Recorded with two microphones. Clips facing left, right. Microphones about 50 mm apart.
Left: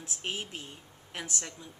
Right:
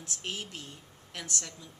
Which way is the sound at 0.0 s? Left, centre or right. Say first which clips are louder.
Left 2 dB; centre.